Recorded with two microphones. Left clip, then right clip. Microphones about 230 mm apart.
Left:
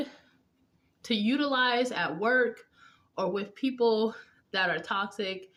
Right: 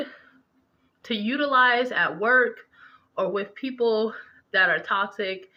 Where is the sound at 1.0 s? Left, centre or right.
Centre.